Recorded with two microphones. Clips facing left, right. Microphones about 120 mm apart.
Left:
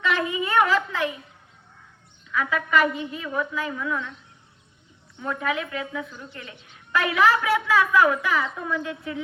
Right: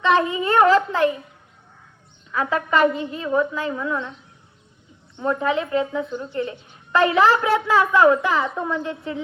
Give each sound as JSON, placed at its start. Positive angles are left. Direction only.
{"t": 0.0, "sound": "a woman's voice", "side_deg": -30}
{"t": 2.3, "sound": "a woman's voice", "side_deg": -35}
{"t": 5.1, "sound": "speech", "side_deg": -30}